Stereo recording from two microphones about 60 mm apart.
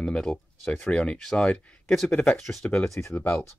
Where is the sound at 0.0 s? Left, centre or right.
Centre.